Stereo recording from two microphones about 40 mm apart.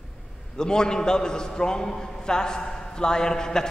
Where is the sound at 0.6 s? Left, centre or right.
Centre.